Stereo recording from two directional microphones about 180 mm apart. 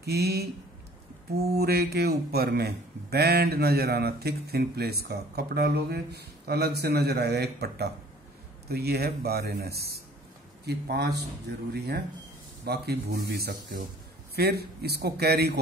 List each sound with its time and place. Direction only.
0.0 s speech: 65° right (ahead or behind)